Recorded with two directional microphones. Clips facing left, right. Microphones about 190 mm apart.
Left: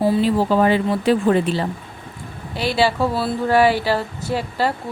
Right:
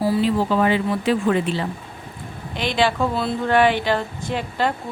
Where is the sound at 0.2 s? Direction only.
40° left (ahead or behind).